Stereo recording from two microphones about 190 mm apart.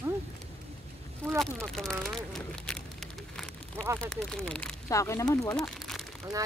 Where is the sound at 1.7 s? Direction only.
Centre (ahead or behind).